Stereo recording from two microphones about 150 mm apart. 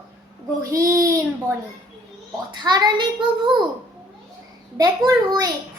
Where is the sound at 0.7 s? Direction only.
20° right (ahead or behind).